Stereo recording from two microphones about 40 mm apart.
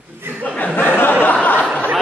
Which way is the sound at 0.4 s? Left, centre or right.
Left.